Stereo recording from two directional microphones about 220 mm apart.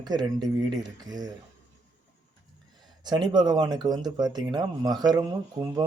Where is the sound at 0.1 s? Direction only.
20° right (ahead or behind).